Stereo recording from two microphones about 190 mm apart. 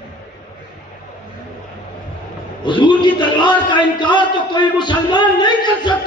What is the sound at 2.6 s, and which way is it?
A man's voice, 25° left (ahead or behind).